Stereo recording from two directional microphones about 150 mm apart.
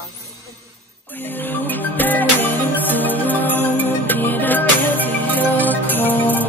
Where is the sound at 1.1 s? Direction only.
10° left (ahead or behind).